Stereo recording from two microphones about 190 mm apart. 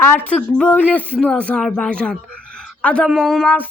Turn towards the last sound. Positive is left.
turn(degrees=5)  # may be behind; listen again after turning